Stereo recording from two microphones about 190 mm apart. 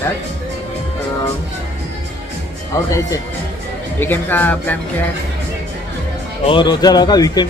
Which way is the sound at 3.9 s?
10° left (ahead or behind).